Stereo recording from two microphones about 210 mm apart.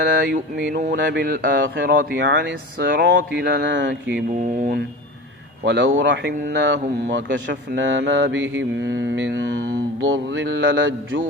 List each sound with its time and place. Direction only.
0.0 s speech: 55° right (ahead or behind)
5.6 s speech: 55° right (ahead or behind)